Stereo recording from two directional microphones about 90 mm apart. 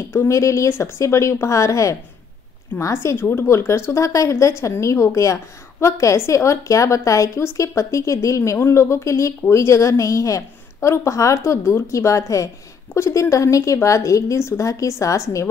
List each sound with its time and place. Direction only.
0.1 s speech: 35° left (ahead or behind)